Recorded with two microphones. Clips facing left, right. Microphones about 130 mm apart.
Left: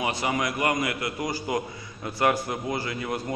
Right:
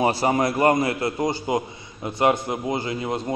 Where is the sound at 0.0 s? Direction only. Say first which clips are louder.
Right 7 dB; 35° right (ahead or behind).